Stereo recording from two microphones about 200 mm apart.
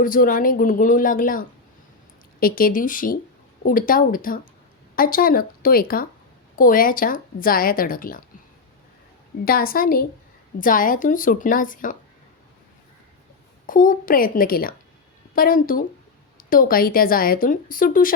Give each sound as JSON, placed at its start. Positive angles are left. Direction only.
{"t": 0.0, "sound": "speech", "side_deg": 45}
{"t": 9.4, "sound": "speech", "side_deg": 50}
{"t": 13.7, "sound": "speech", "side_deg": 45}